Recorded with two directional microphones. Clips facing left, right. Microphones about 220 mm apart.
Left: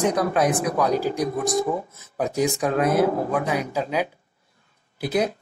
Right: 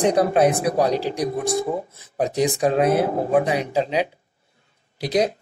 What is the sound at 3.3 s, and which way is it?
Speech, 30° right (ahead or behind).